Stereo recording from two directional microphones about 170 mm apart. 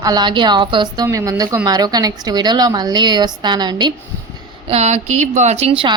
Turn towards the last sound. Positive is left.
turn(degrees=-35)  # may be behind; listen again after turning